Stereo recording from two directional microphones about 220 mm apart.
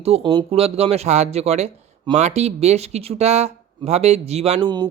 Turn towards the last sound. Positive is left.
turn(degrees=-20)  # may be behind; listen again after turning